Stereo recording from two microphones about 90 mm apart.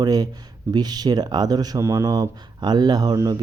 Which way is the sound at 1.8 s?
30° right (ahead or behind).